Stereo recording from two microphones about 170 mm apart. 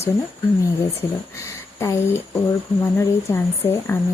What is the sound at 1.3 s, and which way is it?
A woman's voice, 20° left (ahead or behind).